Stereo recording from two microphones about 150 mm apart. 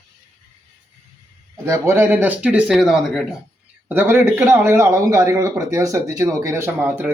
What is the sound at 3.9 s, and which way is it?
A man's voice, 15° right (ahead or behind).